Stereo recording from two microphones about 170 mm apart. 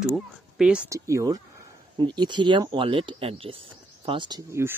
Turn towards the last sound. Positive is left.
turn(degrees=-20)  # may be behind; listen again after turning